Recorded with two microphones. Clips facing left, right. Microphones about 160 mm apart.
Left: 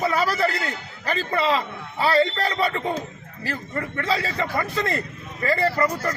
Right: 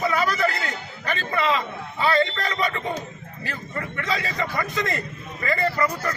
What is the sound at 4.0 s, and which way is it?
A man's voice, 30° left (ahead or behind).